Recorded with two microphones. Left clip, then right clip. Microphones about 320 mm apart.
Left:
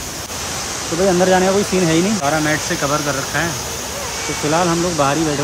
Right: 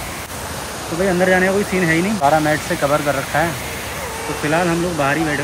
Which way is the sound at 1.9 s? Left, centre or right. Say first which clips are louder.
Right 2 dB; centre.